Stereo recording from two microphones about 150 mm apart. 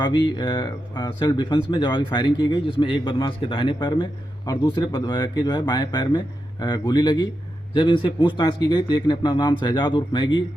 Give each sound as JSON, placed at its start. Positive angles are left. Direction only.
{"t": 0.0, "sound": "speech", "side_deg": 30}